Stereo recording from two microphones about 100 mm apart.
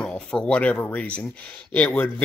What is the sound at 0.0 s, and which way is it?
Speech, 10° left (ahead or behind).